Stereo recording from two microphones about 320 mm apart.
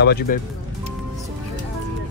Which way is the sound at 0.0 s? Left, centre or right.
Left.